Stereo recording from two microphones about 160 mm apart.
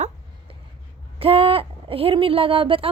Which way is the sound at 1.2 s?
35° right (ahead or behind).